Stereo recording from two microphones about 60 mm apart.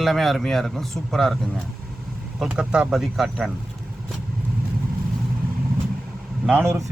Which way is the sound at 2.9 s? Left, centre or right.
Centre.